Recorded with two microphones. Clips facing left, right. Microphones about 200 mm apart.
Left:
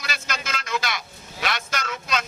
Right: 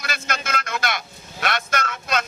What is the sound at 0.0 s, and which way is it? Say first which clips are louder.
Vehicle: right 3 dB; 55° right (ahead or behind).